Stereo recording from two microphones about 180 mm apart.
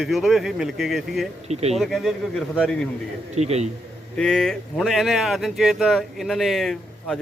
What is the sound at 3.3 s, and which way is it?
Speech, 40° right (ahead or behind).